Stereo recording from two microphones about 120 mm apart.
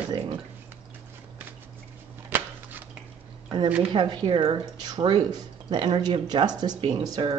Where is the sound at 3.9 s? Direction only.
40° right (ahead or behind).